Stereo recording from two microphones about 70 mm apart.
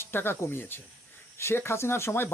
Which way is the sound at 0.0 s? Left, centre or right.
Left.